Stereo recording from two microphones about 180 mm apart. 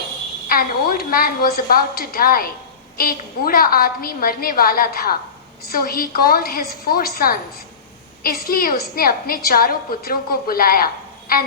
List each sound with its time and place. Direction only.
0.4 s a woman's voice: 55° left (ahead or behind)